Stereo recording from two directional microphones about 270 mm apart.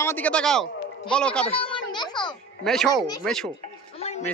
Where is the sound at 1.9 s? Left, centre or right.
Centre.